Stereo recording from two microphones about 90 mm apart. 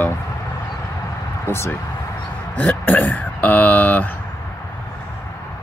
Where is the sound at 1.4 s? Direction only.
30° left (ahead or behind).